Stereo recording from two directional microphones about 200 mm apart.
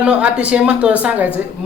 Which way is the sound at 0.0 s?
5° right (ahead or behind).